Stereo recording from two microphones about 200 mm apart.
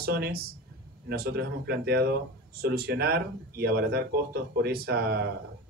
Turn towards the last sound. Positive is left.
turn(degrees=-55)  # may be behind; listen again after turning